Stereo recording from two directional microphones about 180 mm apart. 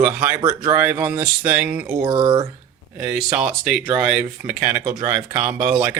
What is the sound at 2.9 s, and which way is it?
Speech, 10° right (ahead or behind).